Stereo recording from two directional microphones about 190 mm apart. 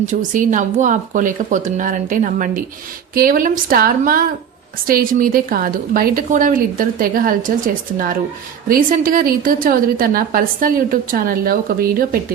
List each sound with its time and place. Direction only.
0.1 s a woman's voice: 45° right (ahead or behind)